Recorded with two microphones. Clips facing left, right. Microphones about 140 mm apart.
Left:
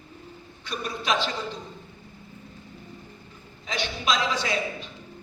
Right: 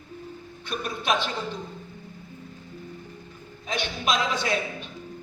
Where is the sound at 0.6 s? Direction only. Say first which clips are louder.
Right 1 dB; 50° right (ahead or behind).